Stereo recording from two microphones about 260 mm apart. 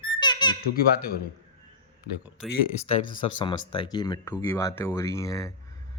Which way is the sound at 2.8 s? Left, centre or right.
Left.